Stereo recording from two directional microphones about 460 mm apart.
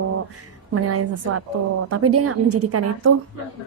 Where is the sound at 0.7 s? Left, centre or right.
Right.